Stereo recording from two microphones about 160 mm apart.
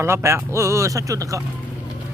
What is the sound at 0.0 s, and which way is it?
Speech, 15° right (ahead or behind).